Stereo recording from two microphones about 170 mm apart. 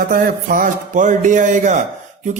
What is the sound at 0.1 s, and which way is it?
Speech, 55° right (ahead or behind).